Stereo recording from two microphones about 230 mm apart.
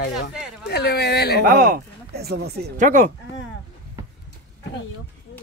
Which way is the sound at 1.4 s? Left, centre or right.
Right.